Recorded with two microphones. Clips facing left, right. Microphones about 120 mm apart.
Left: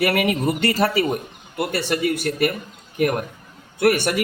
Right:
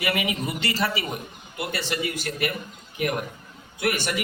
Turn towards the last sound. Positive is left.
turn(degrees=55)  # may be behind; listen again after turning